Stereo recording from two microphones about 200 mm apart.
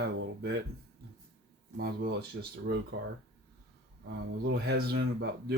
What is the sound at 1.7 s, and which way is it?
Speech, 50° right (ahead or behind).